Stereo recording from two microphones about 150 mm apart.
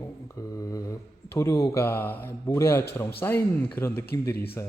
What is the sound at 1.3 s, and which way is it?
Speech, 20° left (ahead or behind).